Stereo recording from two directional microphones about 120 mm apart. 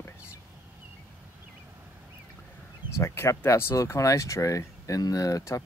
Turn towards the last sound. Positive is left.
turn(degrees=30)  # may be behind; listen again after turning